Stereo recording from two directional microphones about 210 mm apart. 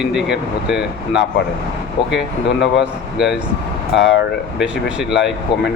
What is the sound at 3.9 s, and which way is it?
Speech, 60° left (ahead or behind).